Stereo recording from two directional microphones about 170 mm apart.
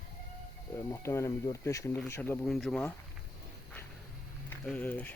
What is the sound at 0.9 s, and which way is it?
Speech, 15° left (ahead or behind).